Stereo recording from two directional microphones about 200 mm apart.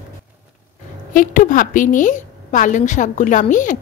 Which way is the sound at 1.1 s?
40° left (ahead or behind).